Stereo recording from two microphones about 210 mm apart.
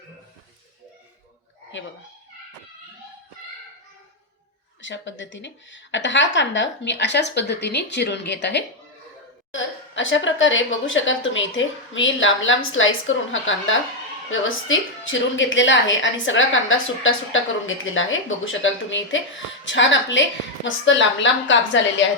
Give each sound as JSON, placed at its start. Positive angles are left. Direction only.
{"t": 4.8, "sound": "a woman's voice", "side_deg": 60}